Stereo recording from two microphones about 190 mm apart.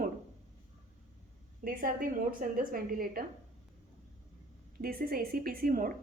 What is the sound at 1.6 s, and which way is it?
A woman's voice, 50° right (ahead or behind).